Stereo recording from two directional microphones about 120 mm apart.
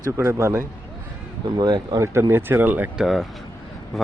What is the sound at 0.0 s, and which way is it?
Speech, 25° right (ahead or behind).